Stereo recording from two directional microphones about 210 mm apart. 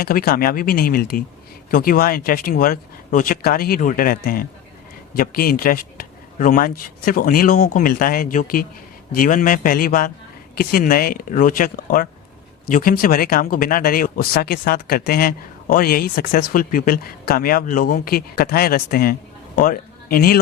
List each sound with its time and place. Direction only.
0.0 s a man's voice: 45° left (ahead or behind)